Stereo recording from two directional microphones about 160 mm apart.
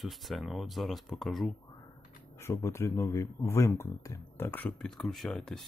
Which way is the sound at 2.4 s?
15° left (ahead or behind).